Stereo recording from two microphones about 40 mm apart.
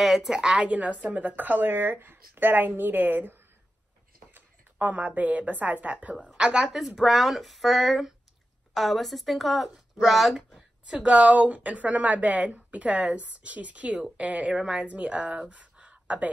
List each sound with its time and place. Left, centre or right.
0.0 s a woman's voice: centre
0.3 s a woman's voice: centre
0.6 s a woman's voice: right
4.7 s a woman's voice: right
6.1 s a woman's voice: centre
7.0 s speech: centre
10.9 s a woman's voice: right
15.5 s a sound: right